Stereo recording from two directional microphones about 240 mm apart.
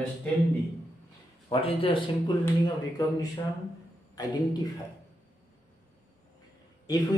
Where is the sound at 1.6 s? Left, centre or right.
Left.